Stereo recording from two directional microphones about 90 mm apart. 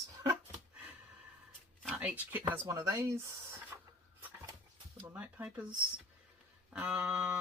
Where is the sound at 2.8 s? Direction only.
30° right (ahead or behind).